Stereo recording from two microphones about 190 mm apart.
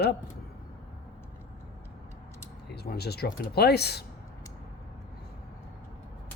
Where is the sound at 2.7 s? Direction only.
60° left (ahead or behind).